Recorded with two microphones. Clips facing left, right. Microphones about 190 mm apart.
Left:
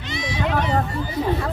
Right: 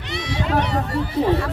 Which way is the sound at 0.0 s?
65° right (ahead or behind).